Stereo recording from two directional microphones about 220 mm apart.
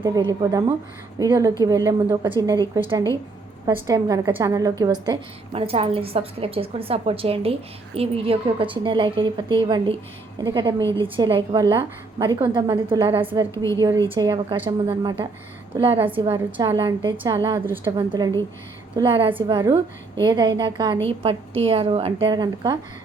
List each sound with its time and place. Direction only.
0.0 s a woman's voice: 15° right (ahead or behind)
3.7 s a woman's voice: 15° right (ahead or behind)
13.2 s a woman's voice: 10° right (ahead or behind)